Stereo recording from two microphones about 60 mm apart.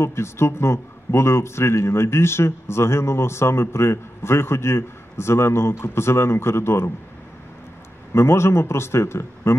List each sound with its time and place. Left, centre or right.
0.0 s speech: left
8.1 s speech: left